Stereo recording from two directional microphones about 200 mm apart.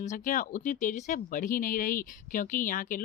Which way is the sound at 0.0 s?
40° left (ahead or behind).